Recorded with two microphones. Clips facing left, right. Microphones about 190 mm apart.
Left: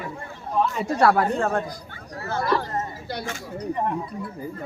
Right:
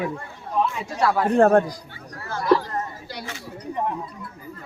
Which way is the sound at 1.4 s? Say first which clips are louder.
Right 9 dB; 60° right (ahead or behind).